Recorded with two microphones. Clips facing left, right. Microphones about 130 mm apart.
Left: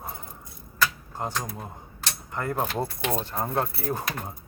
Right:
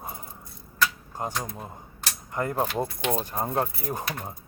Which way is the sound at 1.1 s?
15° right (ahead or behind).